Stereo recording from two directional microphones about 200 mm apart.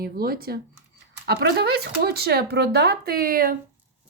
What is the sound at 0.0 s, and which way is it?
Speech, 50° right (ahead or behind).